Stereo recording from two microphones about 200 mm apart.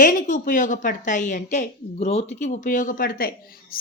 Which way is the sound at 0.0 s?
40° left (ahead or behind).